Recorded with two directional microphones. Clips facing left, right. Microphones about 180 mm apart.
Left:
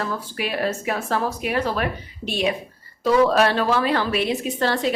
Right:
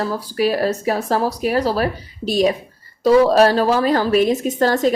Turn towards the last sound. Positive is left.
turn(degrees=-45)  # may be behind; listen again after turning